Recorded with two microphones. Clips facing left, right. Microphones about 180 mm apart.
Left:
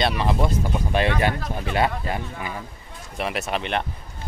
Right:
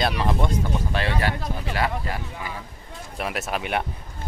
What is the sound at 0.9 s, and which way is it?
Speech, 20° left (ahead or behind).